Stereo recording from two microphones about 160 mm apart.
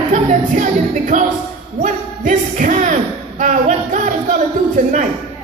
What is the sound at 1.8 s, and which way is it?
Speech, 50° right (ahead or behind).